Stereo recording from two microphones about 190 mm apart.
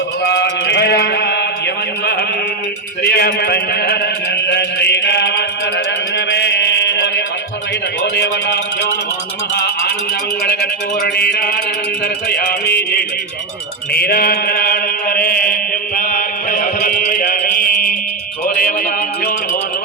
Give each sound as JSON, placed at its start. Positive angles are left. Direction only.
{"t": 0.3, "sound": "mantra", "side_deg": 65}
{"t": 3.0, "sound": "music", "side_deg": 55}
{"t": 4.4, "sound": "chant", "side_deg": 60}
{"t": 8.0, "sound": "a sound", "side_deg": 60}
{"t": 10.4, "sound": "a sound", "side_deg": 55}
{"t": 12.3, "sound": "music", "side_deg": 55}
{"t": 13.9, "sound": "mantra", "side_deg": 55}
{"t": 18.4, "sound": "music", "side_deg": 50}